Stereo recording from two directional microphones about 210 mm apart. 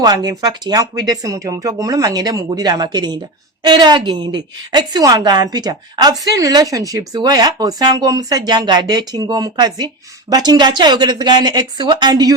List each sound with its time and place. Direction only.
0.0 s a woman's voice: 20° right (ahead or behind)